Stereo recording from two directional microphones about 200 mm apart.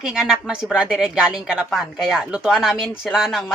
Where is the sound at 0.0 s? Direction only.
Centre (ahead or behind).